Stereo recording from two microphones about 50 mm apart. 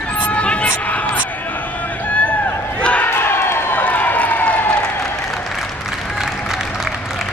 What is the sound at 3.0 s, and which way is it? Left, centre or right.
Crowd, left.